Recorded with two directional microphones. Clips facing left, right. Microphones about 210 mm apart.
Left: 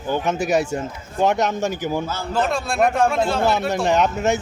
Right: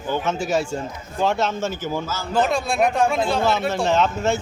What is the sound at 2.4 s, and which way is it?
Speech, centre (ahead or behind).